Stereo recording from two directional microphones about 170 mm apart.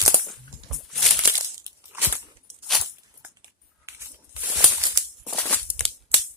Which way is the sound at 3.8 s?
15° right (ahead or behind).